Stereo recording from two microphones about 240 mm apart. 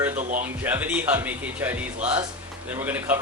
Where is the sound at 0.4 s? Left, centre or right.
Centre.